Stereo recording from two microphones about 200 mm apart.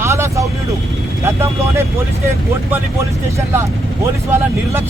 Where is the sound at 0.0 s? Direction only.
15° right (ahead or behind).